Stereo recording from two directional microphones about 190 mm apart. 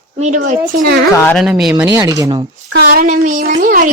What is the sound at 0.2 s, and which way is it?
Speech, 40° right (ahead or behind).